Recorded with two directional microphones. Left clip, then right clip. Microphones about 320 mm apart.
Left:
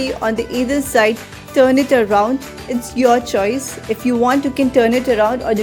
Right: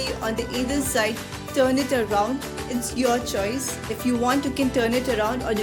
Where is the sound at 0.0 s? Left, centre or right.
Left.